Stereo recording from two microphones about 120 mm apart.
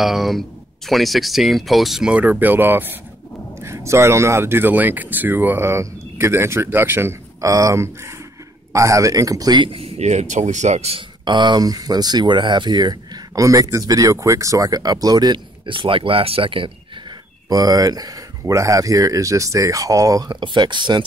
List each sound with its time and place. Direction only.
0.0 s speech: centre (ahead or behind); by 11.1 s 60° right (ahead or behind)
11.2 s speech: 40° right (ahead or behind)
17.5 s speech: 30° right (ahead or behind)